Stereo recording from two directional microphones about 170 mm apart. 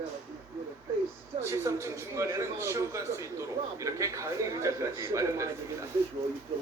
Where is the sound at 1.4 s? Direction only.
15° right (ahead or behind).